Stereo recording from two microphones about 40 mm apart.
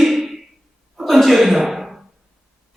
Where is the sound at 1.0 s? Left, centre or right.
Centre.